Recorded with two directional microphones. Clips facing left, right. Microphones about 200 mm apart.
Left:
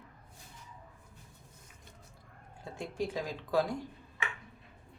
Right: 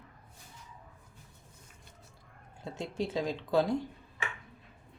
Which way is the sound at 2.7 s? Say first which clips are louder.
Right 2 dB; 25° right (ahead or behind).